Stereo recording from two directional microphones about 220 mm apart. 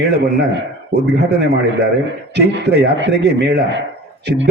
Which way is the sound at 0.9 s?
45° right (ahead or behind).